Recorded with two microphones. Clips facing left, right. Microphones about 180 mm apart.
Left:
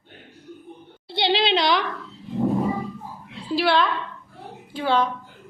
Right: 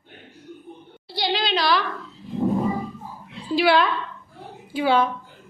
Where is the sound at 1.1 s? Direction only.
25° left (ahead or behind).